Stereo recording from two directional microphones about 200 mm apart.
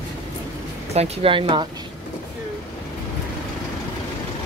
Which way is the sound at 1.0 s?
25° right (ahead or behind).